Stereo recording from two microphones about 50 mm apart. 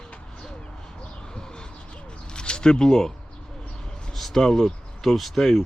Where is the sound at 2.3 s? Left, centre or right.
Centre.